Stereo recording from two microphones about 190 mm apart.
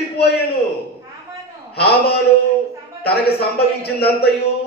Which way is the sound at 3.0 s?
55° left (ahead or behind).